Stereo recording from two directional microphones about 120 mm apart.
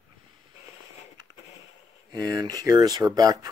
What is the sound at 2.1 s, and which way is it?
Speech, 35° right (ahead or behind).